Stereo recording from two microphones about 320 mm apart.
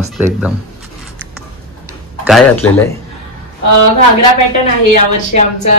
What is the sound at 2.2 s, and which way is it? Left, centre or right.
Speech, centre.